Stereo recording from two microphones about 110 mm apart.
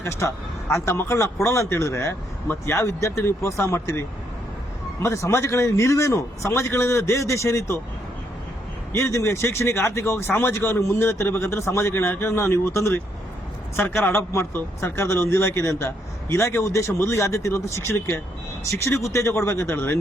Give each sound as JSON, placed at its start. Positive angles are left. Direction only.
{"t": 0.2, "sound": "speech", "side_deg": 25}
{"t": 5.0, "sound": "speech", "side_deg": 25}
{"t": 8.9, "sound": "speech", "side_deg": 25}
{"t": 14.0, "sound": "speech", "side_deg": 20}